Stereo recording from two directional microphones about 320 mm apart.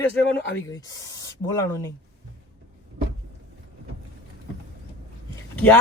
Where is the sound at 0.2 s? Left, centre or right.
Left.